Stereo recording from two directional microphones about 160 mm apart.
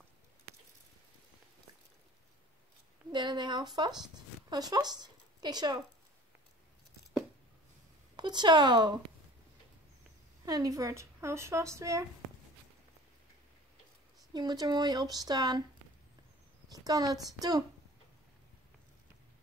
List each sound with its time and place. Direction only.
3.1 s speech: 30° right (ahead or behind)
8.2 s speech: 30° right (ahead or behind)
10.4 s speech: 25° right (ahead or behind)
14.3 s speech: 25° right (ahead or behind)
16.7 s speech: 25° right (ahead or behind)